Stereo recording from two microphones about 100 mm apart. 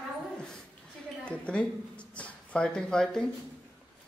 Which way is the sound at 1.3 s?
10° left (ahead or behind).